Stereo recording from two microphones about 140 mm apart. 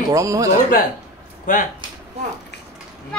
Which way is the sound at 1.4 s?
70° left (ahead or behind).